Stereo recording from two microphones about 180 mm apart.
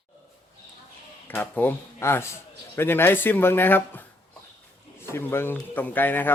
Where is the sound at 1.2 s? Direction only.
10° left (ahead or behind).